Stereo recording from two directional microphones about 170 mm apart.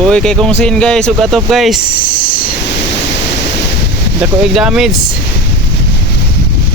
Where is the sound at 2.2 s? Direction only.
55° left (ahead or behind).